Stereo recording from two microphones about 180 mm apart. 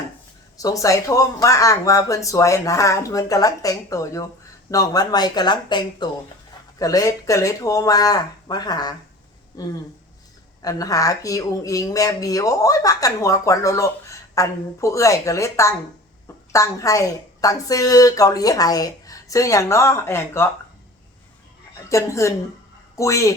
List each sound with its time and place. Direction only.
0.5 s speech: 20° left (ahead or behind)
21.8 s speech: 15° left (ahead or behind)